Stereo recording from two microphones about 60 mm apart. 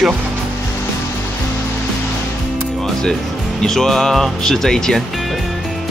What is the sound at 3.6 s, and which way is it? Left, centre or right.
Speech, centre.